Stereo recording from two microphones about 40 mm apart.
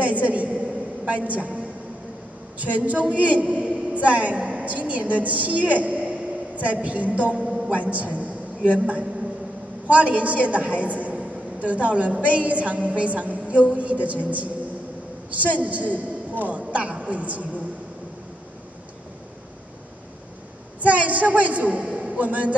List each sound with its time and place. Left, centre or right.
0.0 s a sound: right
1.0 s a man's voice: right
2.6 s a man's voice: right
20.8 s a man's voice: right